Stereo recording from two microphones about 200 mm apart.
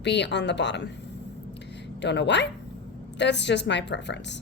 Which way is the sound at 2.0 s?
60° left (ahead or behind).